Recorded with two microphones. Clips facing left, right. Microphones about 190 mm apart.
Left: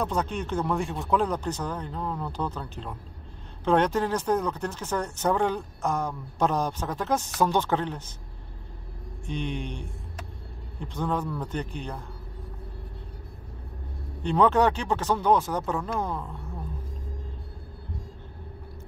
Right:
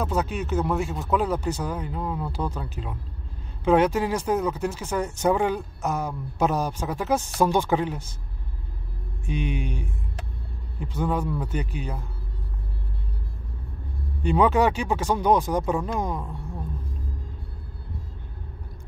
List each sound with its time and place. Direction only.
0.0 s speech: 5° right (ahead or behind)
9.2 s speech: 10° right (ahead or behind)
14.2 s speech: 10° right (ahead or behind)